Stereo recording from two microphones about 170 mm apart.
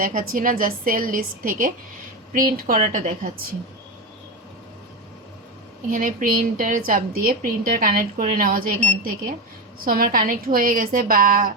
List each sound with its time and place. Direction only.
0.0 s a woman's voice: 50° right (ahead or behind)
5.9 s a woman's voice: 55° right (ahead or behind)
9.8 s a woman's voice: 60° right (ahead or behind)